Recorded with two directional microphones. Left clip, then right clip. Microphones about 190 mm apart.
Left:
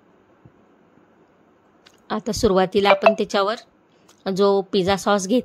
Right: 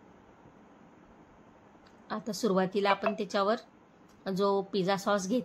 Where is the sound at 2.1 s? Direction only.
45° left (ahead or behind).